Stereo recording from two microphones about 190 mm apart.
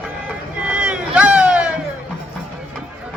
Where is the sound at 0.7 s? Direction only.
5° right (ahead or behind).